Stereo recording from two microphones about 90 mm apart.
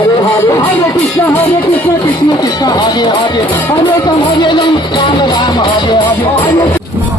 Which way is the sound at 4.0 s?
55° left (ahead or behind).